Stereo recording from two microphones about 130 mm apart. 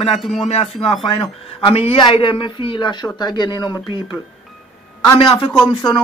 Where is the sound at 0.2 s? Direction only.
Centre (ahead or behind).